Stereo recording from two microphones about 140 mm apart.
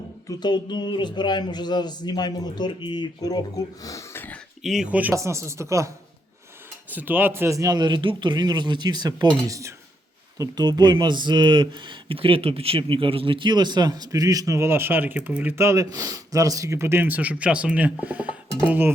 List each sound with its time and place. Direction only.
0.3 s a man's voice: 30° left (ahead or behind)
4.6 s speech: 5° right (ahead or behind)
5.1 s speech: 20° right (ahead or behind)
6.9 s speech: 15° right (ahead or behind)